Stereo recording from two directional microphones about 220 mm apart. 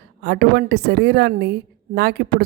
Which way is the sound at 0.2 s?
50° right (ahead or behind).